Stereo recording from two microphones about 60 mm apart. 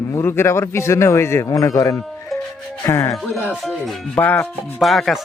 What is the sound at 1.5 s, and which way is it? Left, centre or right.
Speech, left.